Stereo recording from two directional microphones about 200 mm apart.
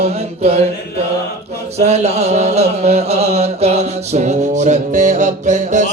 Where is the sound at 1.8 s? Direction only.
35° right (ahead or behind).